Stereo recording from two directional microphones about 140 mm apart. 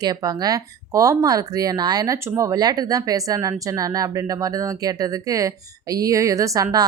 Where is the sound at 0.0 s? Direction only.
25° right (ahead or behind).